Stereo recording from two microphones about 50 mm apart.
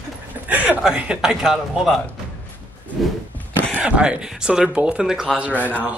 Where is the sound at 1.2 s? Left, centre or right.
Centre.